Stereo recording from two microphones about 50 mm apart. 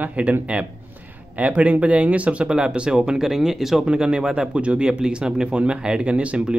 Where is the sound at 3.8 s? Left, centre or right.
Centre.